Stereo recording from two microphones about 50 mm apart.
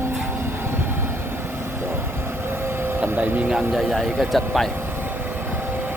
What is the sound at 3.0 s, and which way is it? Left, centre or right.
Speech, right.